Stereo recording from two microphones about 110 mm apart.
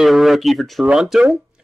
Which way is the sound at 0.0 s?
Centre (ahead or behind).